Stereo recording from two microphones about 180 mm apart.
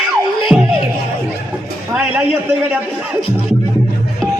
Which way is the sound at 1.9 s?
5° right (ahead or behind).